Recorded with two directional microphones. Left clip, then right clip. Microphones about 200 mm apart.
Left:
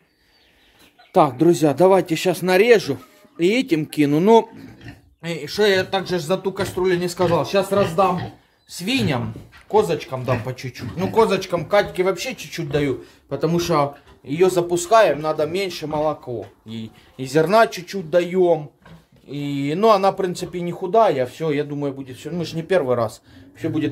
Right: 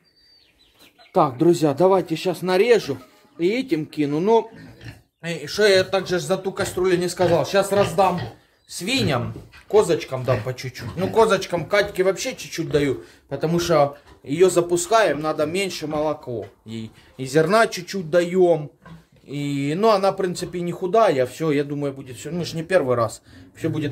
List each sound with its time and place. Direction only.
1.1 s speech: 15° left (ahead or behind); by 4.5 s 35° left (ahead or behind)
5.2 s speech: 10° left (ahead or behind)